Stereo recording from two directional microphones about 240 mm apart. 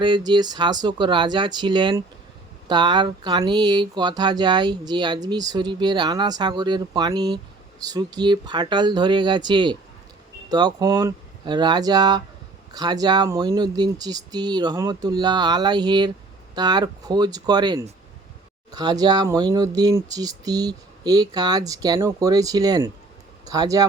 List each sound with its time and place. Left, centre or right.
0.0 s speech: centre